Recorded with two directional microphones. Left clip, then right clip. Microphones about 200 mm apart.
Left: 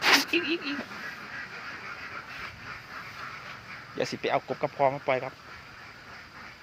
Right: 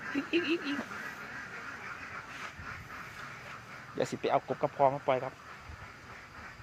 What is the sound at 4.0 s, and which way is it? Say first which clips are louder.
Speech: left 2 dB; 5° right (ahead or behind).